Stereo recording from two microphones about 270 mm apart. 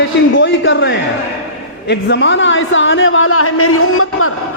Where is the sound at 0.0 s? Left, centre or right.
Left.